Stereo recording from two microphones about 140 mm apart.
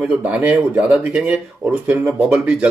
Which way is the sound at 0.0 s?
10° right (ahead or behind).